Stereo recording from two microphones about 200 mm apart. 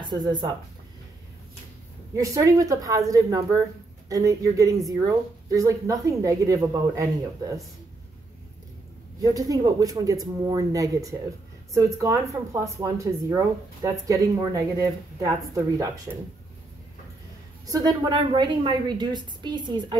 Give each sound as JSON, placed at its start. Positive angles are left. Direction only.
{"t": 0.0, "sound": "speech", "side_deg": -20}
{"t": 2.1, "sound": "speech", "side_deg": -15}
{"t": 9.2, "sound": "speech", "side_deg": -15}
{"t": 17.6, "sound": "a woman's voice", "side_deg": -20}